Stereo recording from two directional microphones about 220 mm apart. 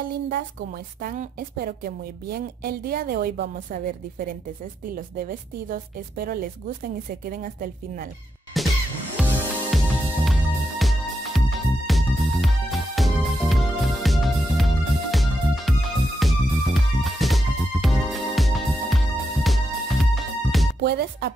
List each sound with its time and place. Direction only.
1.0 s a woman's voice: 40° right (ahead or behind)
8.5 s music: centre (ahead or behind)
20.8 s speech: 45° right (ahead or behind)